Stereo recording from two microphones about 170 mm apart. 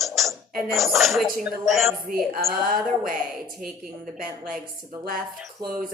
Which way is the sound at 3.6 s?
55° right (ahead or behind).